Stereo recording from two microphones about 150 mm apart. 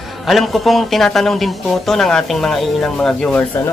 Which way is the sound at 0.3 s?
Centre (ahead or behind).